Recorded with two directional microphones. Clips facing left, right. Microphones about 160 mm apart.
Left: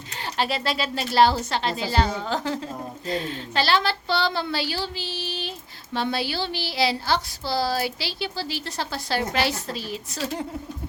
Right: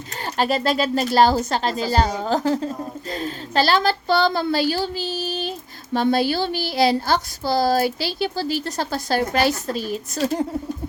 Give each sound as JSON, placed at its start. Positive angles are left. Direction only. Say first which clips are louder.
{"t": 0.3, "sound": "speech", "louder": "right 6 dB", "side_deg": -45}